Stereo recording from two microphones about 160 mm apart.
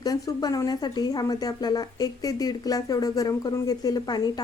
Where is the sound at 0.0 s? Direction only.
20° left (ahead or behind).